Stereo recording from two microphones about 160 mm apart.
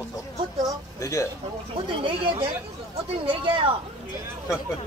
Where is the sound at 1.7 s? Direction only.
35° right (ahead or behind).